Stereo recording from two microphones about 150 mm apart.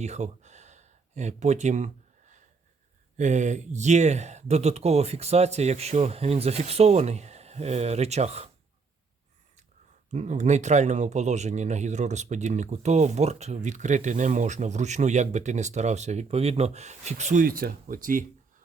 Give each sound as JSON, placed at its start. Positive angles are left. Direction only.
{"t": 0.0, "sound": "a sound", "side_deg": -50}
{"t": 3.2, "sound": "speech", "side_deg": -50}
{"t": 10.1, "sound": "speech", "side_deg": -50}
{"t": 17.4, "sound": "speech", "side_deg": -75}